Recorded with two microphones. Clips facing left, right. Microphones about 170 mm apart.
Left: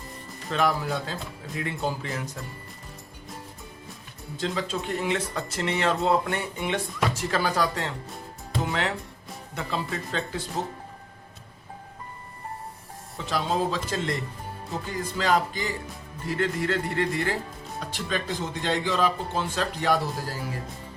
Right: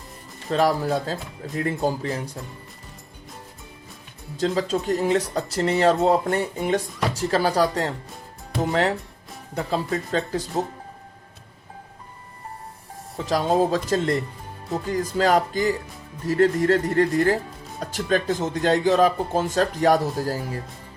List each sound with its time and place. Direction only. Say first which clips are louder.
0.5 s speech: right 5 dB; 35° right (ahead or behind)
4.4 s speech: right 6 dB; 40° right (ahead or behind)
13.1 s speech: right 6 dB; 40° right (ahead or behind)
15.2 s speech: right 5 dB; 45° right (ahead or behind)